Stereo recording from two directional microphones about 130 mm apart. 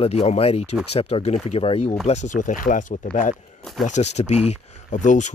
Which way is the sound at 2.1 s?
70° left (ahead or behind).